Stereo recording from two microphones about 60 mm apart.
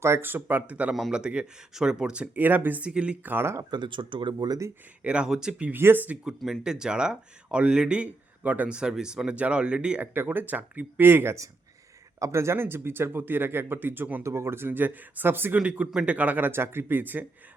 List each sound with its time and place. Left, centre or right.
0.0 s speech: right
0.3 s speech: right
0.7 s speech: right
2.3 s speech: right
2.8 s speech: centre
3.2 s speech: right
4.4 s speech: right
5.0 s speech: centre
5.7 s speech: right
6.6 s speech: centre
10.0 s speech: right
12.2 s speech: right
14.3 s speech: right
15.5 s speech: right